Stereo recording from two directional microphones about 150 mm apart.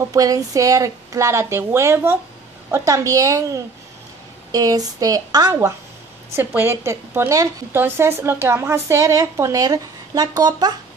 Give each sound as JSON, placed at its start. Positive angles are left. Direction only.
{"t": 0.1, "sound": "a woman's voice", "side_deg": -25}